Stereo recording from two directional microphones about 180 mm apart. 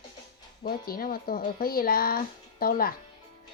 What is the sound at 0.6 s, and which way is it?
Speech, 55° left (ahead or behind).